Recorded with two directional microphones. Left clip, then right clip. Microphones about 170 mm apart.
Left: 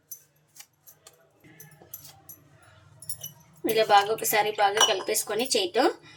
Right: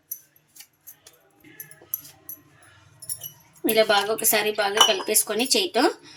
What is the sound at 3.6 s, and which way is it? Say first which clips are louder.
Speech: right 1 dB; 30° right (ahead or behind).